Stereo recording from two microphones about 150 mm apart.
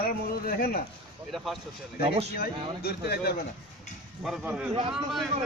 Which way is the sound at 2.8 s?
90° left.